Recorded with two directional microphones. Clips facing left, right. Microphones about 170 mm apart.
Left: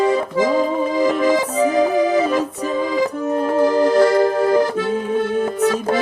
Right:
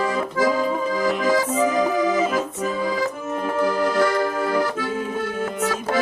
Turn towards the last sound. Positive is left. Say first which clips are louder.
# left 7 dB
turn(degrees=30)  # may be behind; listen again after turning